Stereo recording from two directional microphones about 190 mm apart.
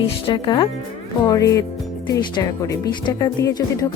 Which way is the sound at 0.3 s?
25° left (ahead or behind).